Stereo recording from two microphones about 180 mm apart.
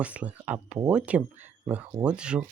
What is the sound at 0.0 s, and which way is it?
Speech, 5° right (ahead or behind).